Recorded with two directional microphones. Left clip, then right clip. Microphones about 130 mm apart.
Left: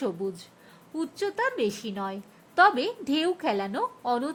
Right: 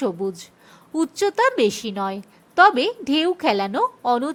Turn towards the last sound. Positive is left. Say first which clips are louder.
# right 7 dB
turn(degrees=-30)  # may be behind; listen again after turning